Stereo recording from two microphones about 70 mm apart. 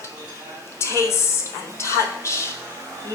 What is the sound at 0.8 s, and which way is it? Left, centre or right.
A woman's voice, left.